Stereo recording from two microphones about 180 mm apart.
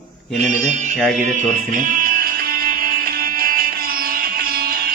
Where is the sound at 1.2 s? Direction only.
45° right (ahead or behind).